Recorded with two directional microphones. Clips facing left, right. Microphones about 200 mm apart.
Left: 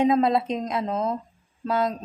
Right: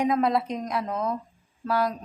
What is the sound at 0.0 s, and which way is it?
Speech, 25° left (ahead or behind).